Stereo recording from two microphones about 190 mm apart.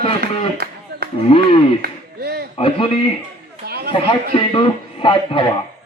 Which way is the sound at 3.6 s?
55° right (ahead or behind).